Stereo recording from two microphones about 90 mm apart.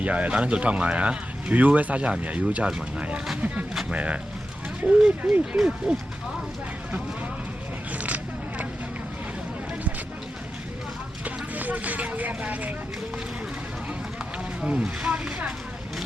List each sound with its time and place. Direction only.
0.0 s speech: 15° right (ahead or behind)
7.9 s vehicle: 15° right (ahead or behind)
11.5 s speech: 20° right (ahead or behind)
14.6 s speech: 10° right (ahead or behind)